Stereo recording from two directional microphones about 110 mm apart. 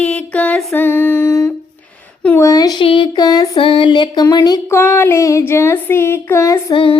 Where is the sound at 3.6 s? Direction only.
50° left (ahead or behind).